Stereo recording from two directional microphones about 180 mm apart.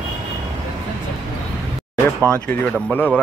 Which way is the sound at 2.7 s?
10° left (ahead or behind).